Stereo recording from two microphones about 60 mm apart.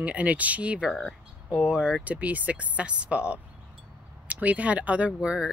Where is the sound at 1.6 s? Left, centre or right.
Centre.